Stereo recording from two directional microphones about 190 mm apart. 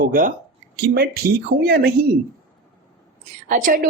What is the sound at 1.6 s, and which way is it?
Speech, 50° right (ahead or behind).